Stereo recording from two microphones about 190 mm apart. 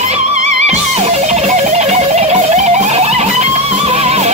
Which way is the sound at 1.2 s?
35° right (ahead or behind).